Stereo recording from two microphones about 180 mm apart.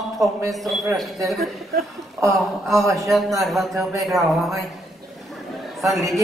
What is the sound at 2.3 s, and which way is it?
Speech, centre (ahead or behind).